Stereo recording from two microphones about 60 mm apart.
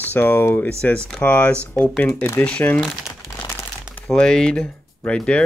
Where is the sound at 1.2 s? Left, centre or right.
Left.